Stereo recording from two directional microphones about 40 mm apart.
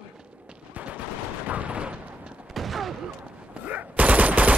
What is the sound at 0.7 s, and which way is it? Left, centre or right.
Machine gun, right.